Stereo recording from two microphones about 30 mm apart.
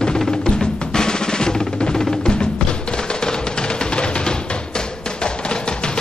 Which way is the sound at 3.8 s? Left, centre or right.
Left.